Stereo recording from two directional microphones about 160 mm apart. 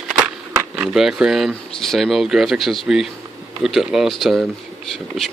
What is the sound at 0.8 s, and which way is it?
Speech, 5° right (ahead or behind).